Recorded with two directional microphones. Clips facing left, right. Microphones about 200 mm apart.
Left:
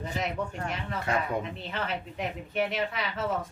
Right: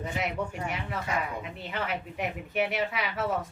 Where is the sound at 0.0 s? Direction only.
10° right (ahead or behind).